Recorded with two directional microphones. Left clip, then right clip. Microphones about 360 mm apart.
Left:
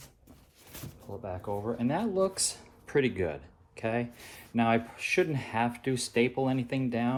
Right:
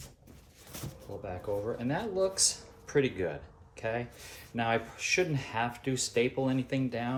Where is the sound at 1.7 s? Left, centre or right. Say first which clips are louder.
Left 3 dB; centre.